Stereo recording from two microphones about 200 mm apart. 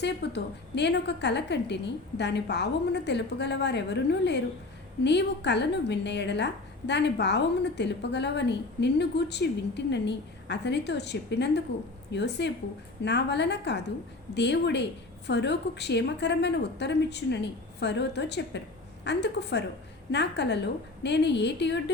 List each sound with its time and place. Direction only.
0.0 s a woman's voice: 60° left (ahead or behind)